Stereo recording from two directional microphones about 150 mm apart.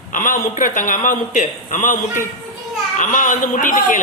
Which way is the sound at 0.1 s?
60° left (ahead or behind).